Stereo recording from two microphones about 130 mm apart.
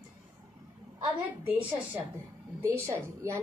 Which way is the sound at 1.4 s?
10° right (ahead or behind).